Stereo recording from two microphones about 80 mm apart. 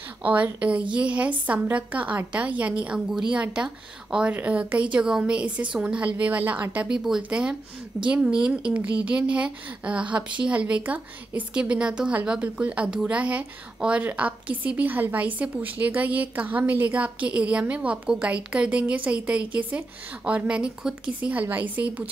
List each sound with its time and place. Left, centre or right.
0.2 s a woman's voice: centre